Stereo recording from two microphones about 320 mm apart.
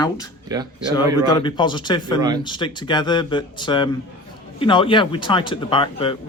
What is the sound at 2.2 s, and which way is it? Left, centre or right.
Speech, centre.